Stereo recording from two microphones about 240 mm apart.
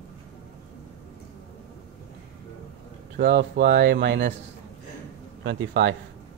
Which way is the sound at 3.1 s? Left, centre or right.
Right.